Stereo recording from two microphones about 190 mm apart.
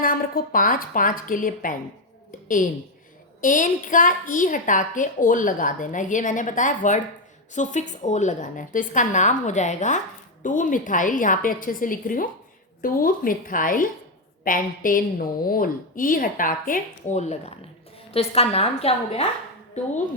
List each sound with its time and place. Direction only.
0.0 s a woman's voice: 45° left (ahead or behind)
3.4 s a woman's voice: 45° left (ahead or behind)